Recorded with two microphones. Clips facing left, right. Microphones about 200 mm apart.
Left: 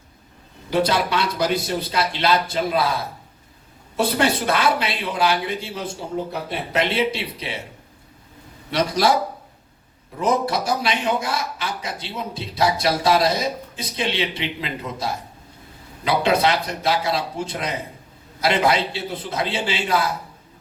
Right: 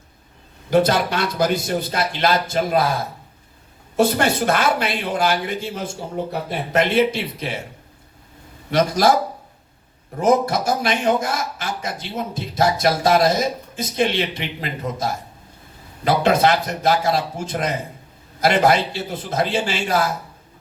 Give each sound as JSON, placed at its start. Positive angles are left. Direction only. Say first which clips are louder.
{"t": 0.7, "sound": "speech", "louder": "right 3 dB", "side_deg": -50}
{"t": 3.9, "sound": "speech", "louder": "right 3 dB", "side_deg": -45}
{"t": 8.7, "sound": "speech", "louder": "right 3 dB", "side_deg": -45}
{"t": 10.2, "sound": "speech", "louder": "right 4 dB", "side_deg": -50}
{"t": 16.0, "sound": "speech", "louder": "right 2 dB", "side_deg": -45}